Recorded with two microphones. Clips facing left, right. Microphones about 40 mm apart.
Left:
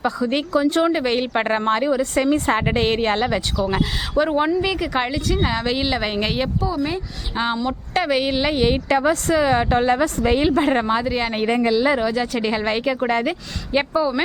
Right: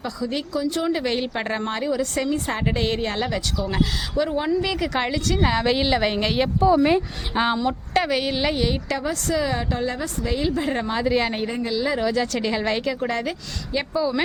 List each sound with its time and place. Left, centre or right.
0.0 s a woman's voice: left
0.9 s a woman's voice: left
4.8 s speech: centre
6.6 s speech: right
7.3 s speech: centre
8.6 s a woman's voice: left
9.6 s a woman's voice: left
11.0 s speech: centre
11.4 s a woman's voice: left
11.7 s a woman's voice: left
11.9 s speech: centre